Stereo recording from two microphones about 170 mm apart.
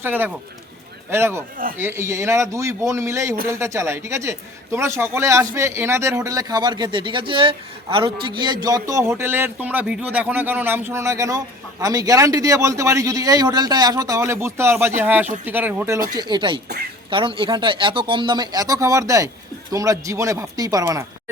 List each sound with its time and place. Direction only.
0.0 s speech: 10° right (ahead or behind)